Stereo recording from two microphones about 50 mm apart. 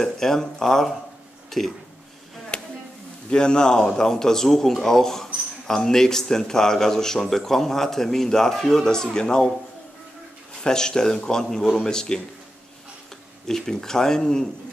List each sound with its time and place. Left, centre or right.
0.0 s a man's voice: centre
2.5 s chop: left
3.3 s a man's voice: centre
10.5 s a man's voice: centre
13.5 s a man's voice: centre